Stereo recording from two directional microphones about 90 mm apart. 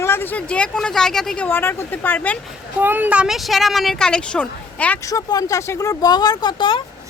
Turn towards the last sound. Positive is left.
turn(degrees=60)  # may be behind; listen again after turning